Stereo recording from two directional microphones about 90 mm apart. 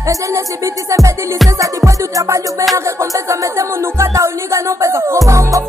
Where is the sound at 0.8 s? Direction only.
35° right (ahead or behind).